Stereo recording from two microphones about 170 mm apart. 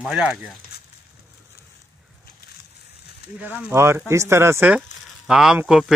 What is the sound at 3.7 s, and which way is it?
Speech, 15° right (ahead or behind).